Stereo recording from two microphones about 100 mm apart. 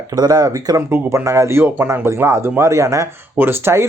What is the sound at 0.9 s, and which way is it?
Speech, 25° right (ahead or behind).